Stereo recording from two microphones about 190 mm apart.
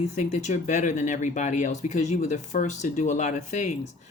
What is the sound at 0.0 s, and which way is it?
Speech, 35° left (ahead or behind).